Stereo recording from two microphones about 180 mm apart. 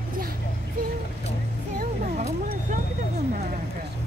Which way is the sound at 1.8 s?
50° right (ahead or behind).